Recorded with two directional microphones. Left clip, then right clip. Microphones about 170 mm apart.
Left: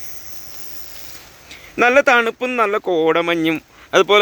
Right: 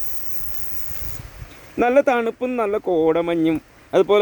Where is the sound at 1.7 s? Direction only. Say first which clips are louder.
Left 4 dB; 10° right (ahead or behind).